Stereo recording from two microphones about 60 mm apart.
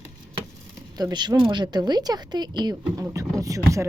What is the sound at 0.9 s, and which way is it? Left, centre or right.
Speech, right.